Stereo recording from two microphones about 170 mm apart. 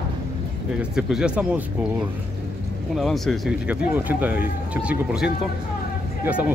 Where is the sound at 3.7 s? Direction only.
10° right (ahead or behind).